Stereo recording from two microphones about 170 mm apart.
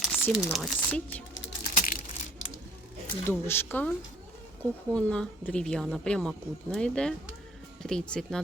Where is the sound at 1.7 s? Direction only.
50° left (ahead or behind).